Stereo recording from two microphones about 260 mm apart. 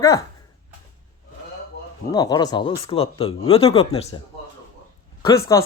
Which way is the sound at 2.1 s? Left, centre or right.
Centre.